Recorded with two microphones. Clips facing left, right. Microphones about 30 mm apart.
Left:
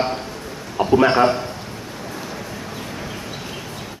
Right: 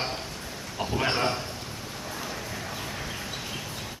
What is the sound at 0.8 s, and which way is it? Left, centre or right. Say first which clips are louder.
Speech: left 12 dB; left.